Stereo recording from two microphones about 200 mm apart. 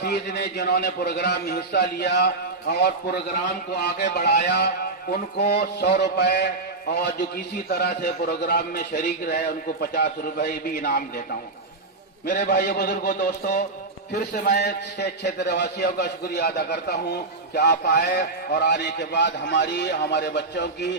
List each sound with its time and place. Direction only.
0.0 s a man's voice: 55° left (ahead or behind)
7.7 s a man's voice: 50° left (ahead or behind)
12.2 s a man's voice: 55° left (ahead or behind)